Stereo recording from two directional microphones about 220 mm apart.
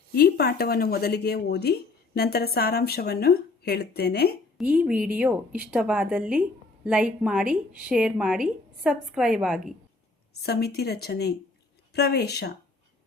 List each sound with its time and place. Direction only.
0.1 s speech: 45° left (ahead or behind)
4.5 s a woman's voice: 5° right (ahead or behind)
10.4 s speech: 45° left (ahead or behind)